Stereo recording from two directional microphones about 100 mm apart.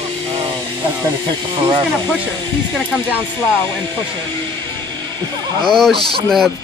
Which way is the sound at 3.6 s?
20° left (ahead or behind).